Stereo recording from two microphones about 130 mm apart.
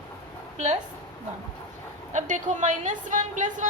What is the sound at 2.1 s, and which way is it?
A woman's voice, 75° right (ahead or behind).